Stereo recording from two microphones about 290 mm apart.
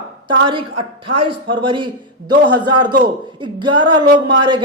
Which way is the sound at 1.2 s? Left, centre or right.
Centre.